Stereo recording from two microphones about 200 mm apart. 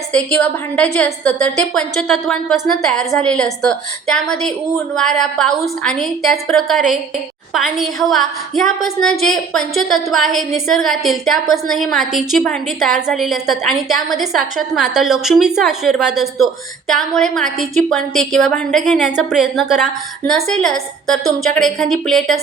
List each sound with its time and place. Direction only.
0.1 s a woman's voice: 5° left (ahead or behind)